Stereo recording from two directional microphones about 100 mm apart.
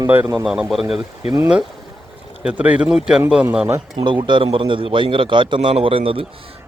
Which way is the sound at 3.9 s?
50° right (ahead or behind).